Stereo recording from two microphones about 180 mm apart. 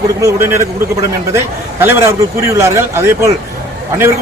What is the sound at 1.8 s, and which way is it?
A man's voice, 15° right (ahead or behind).